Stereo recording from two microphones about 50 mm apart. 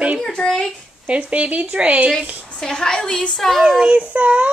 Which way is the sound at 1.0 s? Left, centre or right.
Right.